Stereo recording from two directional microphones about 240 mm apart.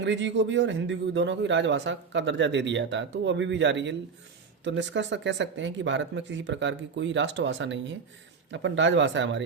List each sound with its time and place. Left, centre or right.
0.0 s speech: right